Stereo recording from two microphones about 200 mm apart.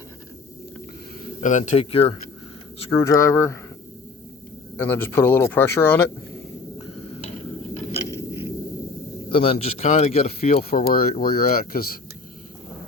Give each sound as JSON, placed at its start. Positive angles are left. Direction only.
{"t": 1.4, "sound": "a man's voice", "side_deg": 40}
{"t": 2.9, "sound": "speech", "side_deg": 15}
{"t": 4.8, "sound": "speech", "side_deg": 10}
{"t": 7.9, "sound": "a sound", "side_deg": 30}
{"t": 9.3, "sound": "a man's voice", "side_deg": 30}
{"t": 10.6, "sound": "speech", "side_deg": 50}